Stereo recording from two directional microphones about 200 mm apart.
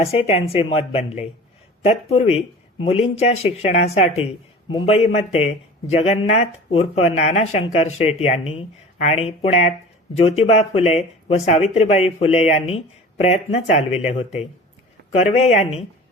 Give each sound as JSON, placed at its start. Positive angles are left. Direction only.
{"t": 0.0, "sound": "a woman's voice", "side_deg": 30}